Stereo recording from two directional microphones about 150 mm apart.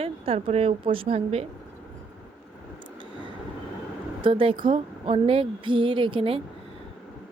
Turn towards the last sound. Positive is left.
turn(degrees=-35)  # may be behind; listen again after turning